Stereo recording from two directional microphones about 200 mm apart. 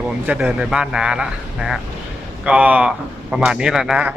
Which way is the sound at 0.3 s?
5° right (ahead or behind).